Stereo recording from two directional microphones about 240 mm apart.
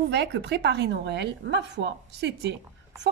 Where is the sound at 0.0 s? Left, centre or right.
Right.